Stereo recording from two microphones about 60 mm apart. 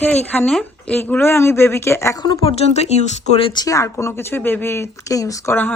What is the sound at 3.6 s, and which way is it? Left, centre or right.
Speech, left.